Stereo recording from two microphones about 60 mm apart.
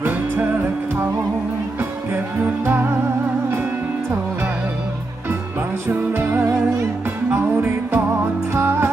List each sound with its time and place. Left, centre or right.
0.0 s music: right
1.8 s music: right
5.9 s music: right